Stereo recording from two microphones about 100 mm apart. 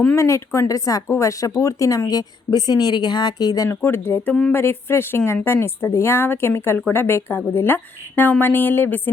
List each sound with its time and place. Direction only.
0.2 s speech: 30° left (ahead or behind)
3.8 s a woman's voice: 25° left (ahead or behind)